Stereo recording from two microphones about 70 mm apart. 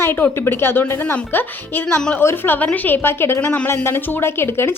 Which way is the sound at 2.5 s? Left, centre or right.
Left.